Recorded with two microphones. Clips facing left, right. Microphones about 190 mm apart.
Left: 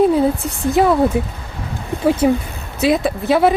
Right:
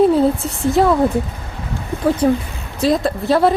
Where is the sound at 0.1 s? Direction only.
Centre (ahead or behind).